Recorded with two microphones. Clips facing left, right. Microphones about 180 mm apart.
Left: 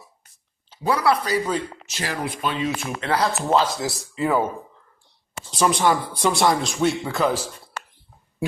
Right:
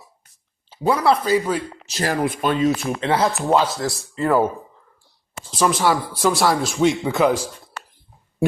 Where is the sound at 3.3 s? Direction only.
5° right (ahead or behind).